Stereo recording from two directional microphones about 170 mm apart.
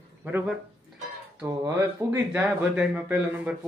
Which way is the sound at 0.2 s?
5° right (ahead or behind).